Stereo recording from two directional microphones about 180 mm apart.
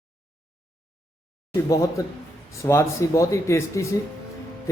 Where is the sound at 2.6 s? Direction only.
15° left (ahead or behind).